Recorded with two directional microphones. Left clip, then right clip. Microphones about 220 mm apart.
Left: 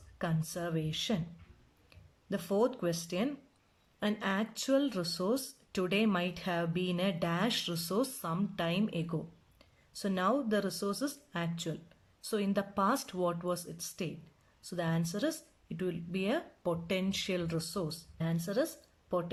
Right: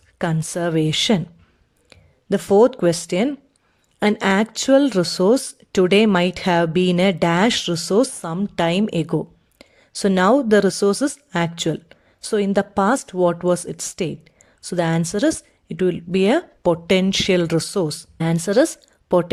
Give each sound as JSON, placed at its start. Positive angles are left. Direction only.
{"t": 0.2, "sound": "speech", "side_deg": -40}